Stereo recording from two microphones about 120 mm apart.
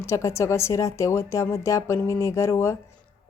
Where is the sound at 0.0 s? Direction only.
25° left (ahead or behind).